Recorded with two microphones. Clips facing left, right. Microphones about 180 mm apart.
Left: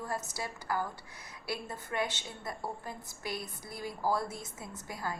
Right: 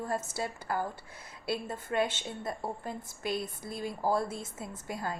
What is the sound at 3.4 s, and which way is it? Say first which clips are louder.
A woman's voice: right 4 dB; 25° right (ahead or behind).